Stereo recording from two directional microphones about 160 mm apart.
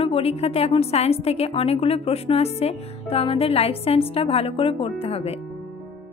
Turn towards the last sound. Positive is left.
turn(degrees=40)  # may be behind; listen again after turning